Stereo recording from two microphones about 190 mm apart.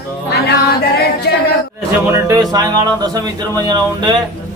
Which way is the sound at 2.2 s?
20° right (ahead or behind).